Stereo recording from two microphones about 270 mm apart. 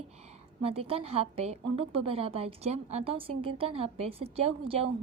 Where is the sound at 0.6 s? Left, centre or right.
Right.